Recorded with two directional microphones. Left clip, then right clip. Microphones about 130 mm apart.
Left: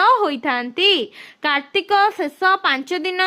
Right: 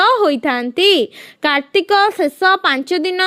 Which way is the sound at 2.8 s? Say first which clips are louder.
Right 5 dB; 25° right (ahead or behind).